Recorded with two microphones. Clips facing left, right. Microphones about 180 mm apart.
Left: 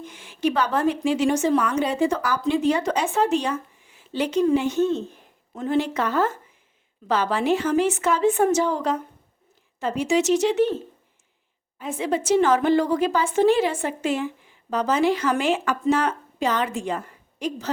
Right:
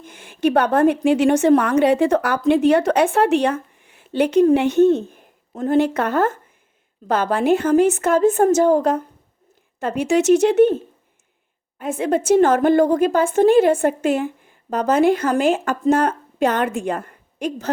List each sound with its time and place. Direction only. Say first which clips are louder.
0.0 s a woman's voice: right 4 dB; 50° right (ahead or behind)
11.8 s a woman's voice: right 5 dB; 50° right (ahead or behind)